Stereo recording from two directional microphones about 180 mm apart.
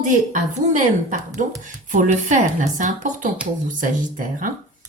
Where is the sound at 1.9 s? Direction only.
45° right (ahead or behind).